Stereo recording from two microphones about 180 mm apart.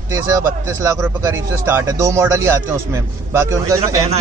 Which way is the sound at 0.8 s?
15° right (ahead or behind).